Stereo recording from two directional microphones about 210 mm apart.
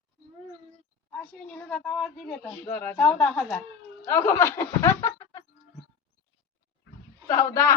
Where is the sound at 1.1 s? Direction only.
5° left (ahead or behind).